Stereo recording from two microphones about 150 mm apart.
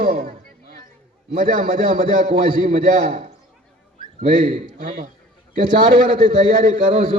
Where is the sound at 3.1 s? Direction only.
50° right (ahead or behind).